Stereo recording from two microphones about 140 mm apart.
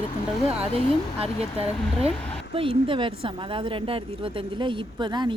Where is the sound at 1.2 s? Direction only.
45° right (ahead or behind).